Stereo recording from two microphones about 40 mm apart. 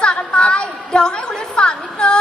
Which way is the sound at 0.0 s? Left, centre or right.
Left.